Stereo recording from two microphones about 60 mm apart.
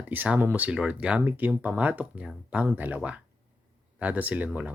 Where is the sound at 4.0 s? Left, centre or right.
Right.